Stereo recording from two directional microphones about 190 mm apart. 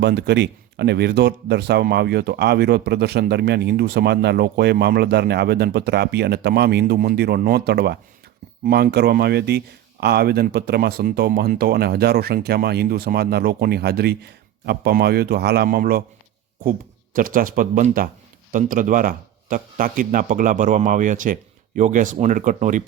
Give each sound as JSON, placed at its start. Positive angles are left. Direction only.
{"t": 0.0, "sound": "speech", "side_deg": -60}
{"t": 17.2, "sound": "speech", "side_deg": -45}